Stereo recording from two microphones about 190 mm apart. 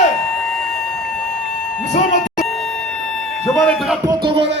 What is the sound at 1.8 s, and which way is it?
Speech, 40° left (ahead or behind).